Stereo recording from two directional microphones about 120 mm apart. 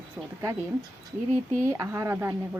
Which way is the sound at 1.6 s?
25° right (ahead or behind).